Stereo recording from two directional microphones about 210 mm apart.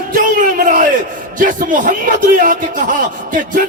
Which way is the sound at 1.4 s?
40° right (ahead or behind).